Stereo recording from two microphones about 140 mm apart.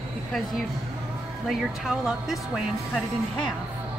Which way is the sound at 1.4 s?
Centre (ahead or behind).